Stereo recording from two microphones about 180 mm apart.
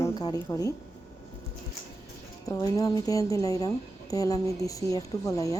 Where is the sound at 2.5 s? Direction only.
20° left (ahead or behind).